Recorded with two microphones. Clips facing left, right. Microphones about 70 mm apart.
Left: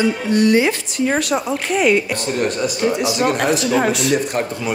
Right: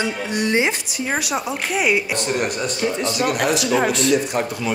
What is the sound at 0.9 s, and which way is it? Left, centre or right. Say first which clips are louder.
A man's voice: left 7 dB; centre.